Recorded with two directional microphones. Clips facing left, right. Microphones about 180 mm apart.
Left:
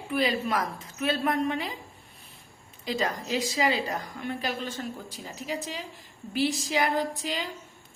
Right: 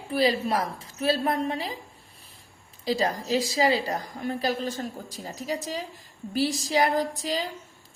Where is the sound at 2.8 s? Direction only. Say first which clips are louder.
Right 4 dB; 35° right (ahead or behind).